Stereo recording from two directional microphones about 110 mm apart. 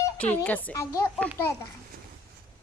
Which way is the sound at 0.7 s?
30° left (ahead or behind).